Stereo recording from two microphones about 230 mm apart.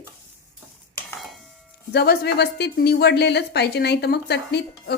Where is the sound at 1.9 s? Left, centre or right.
Left.